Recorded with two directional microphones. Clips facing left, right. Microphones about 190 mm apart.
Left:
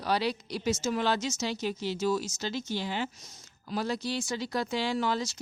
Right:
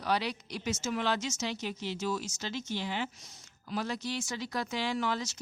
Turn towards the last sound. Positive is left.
turn(degrees=35)  # may be behind; listen again after turning